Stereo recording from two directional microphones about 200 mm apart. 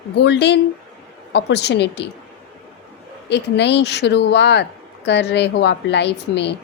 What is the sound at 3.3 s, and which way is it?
Speech, 60° left (ahead or behind).